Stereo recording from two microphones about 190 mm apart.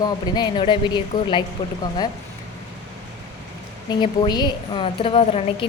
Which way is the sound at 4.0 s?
20° left (ahead or behind).